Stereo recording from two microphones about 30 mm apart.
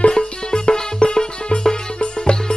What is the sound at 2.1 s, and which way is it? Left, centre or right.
Music, left.